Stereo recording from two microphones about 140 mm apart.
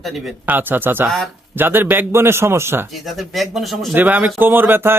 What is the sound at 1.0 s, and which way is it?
Speech, centre (ahead or behind).